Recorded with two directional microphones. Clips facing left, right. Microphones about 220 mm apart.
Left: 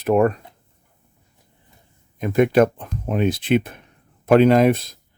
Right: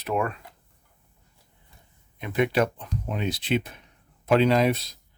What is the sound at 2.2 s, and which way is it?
Speech, 45° left (ahead or behind).